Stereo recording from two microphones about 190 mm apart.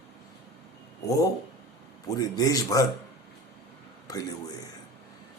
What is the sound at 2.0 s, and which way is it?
Speech, 20° left (ahead or behind).